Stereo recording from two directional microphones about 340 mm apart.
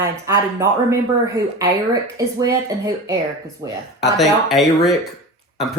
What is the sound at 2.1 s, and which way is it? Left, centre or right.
Speech, centre.